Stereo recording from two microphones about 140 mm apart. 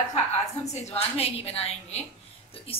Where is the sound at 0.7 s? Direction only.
50° left (ahead or behind).